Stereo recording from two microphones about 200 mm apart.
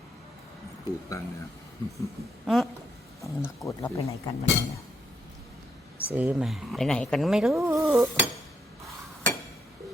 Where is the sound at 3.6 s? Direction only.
15° left (ahead or behind).